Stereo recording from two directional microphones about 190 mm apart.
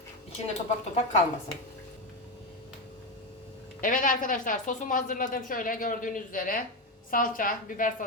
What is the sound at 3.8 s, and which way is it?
A woman's voice, 45° left (ahead or behind).